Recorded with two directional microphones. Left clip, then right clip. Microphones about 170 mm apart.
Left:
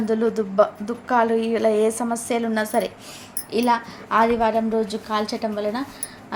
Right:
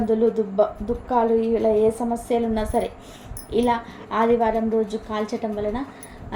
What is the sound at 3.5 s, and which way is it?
Speech, 70° left (ahead or behind).